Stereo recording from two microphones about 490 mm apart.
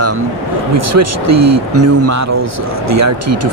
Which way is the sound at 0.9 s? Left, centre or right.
Right.